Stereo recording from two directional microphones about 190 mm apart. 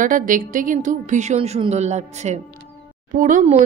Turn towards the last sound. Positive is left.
turn(degrees=-40)  # may be behind; listen again after turning